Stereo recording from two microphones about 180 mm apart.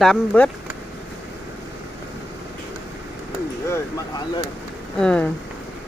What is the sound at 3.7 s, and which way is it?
Speech, 15° left (ahead or behind).